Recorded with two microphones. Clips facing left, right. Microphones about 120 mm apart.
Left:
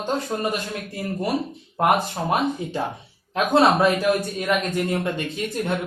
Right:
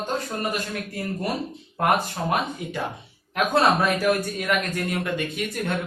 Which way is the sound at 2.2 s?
25° left (ahead or behind).